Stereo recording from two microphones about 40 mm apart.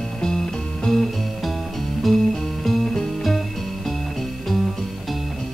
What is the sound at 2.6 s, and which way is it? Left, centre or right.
Music, centre.